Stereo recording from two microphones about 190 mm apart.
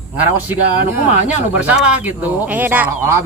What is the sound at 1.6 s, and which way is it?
Speech, 5° right (ahead or behind).